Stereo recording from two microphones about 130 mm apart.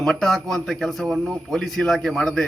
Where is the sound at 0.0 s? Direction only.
5° left (ahead or behind).